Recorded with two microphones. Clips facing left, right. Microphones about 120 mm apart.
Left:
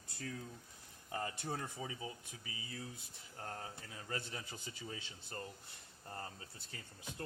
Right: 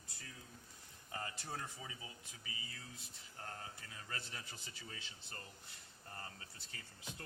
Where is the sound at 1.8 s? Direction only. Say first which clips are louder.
Left 7 dB; 30° left (ahead or behind).